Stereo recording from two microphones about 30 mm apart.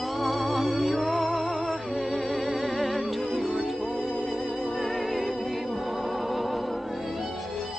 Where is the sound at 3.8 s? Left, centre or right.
Centre.